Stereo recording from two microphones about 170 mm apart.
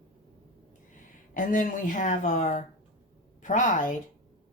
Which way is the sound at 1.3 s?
50° left (ahead or behind).